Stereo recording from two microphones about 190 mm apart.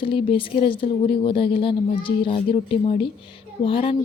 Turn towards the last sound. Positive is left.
turn(degrees=30)  # may be behind; listen again after turning